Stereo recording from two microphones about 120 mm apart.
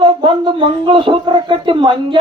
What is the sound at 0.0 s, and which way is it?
A woman's voice, 45° right (ahead or behind).